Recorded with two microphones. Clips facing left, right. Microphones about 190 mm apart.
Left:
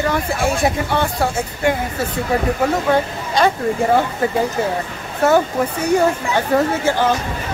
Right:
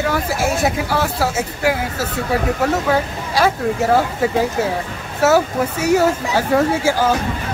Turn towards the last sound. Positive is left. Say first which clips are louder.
# right 1 dB
turn(degrees=-10)  # may be behind; listen again after turning